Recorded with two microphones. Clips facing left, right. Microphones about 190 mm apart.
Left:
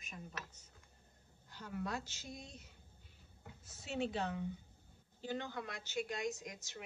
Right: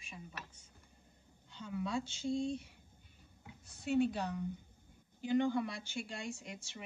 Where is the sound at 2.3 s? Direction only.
30° right (ahead or behind).